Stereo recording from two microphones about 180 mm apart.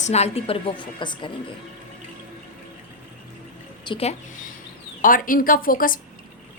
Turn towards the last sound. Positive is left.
turn(degrees=50)  # may be behind; listen again after turning